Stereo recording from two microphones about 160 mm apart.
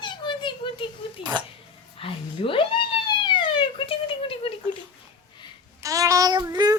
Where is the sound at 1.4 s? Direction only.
30° right (ahead or behind).